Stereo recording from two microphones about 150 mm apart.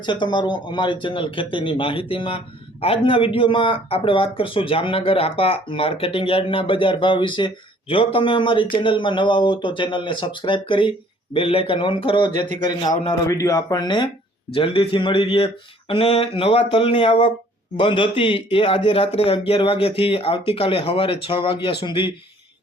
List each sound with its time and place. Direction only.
0.0 s speech: 30° left (ahead or behind)